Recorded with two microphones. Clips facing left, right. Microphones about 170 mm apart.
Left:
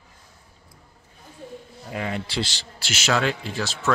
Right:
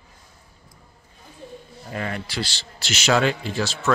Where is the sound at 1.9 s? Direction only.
10° left (ahead or behind).